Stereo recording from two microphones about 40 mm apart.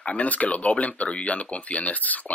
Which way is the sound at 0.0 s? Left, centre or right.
Left.